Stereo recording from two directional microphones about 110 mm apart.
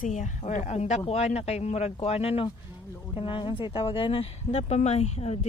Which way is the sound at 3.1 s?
50° left (ahead or behind).